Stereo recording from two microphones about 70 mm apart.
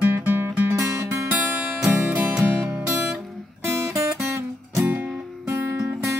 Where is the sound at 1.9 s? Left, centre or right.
Right.